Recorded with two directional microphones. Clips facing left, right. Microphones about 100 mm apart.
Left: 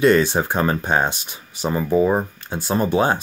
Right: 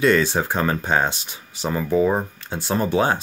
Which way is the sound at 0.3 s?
15° left (ahead or behind).